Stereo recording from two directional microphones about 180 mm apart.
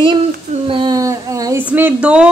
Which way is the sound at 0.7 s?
25° right (ahead or behind).